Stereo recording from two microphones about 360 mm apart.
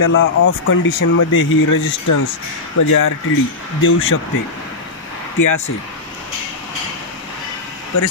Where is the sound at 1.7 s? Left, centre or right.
Left.